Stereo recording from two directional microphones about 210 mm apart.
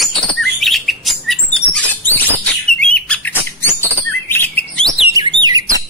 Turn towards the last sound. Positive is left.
turn(degrees=-15)  # may be behind; listen again after turning